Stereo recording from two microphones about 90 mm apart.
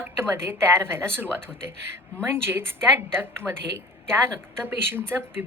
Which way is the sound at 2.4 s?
25° right (ahead or behind).